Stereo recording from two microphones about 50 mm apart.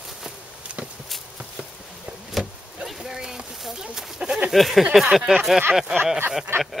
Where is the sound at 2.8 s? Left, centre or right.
Centre.